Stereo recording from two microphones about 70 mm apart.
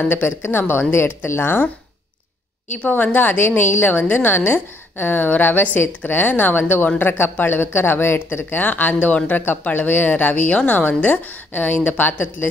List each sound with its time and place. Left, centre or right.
0.1 s speech: left
2.7 s a woman's voice: left